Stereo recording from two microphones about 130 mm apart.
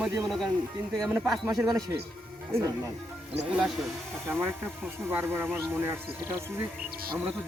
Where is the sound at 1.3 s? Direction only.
25° right (ahead or behind).